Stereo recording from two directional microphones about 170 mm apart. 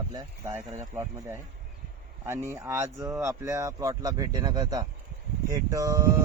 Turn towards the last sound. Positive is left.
turn(degrees=-20)  # may be behind; listen again after turning